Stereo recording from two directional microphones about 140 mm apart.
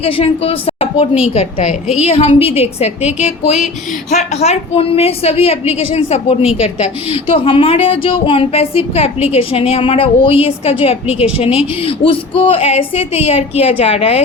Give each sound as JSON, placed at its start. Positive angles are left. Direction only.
{"t": 0.0, "sound": "a woman's voice", "side_deg": 40}
{"t": 1.3, "sound": "speech", "side_deg": 55}